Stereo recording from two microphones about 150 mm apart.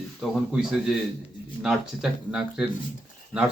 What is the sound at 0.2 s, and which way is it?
Speech, 5° right (ahead or behind).